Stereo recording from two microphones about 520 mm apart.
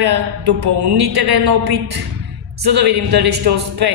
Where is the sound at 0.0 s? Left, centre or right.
Right.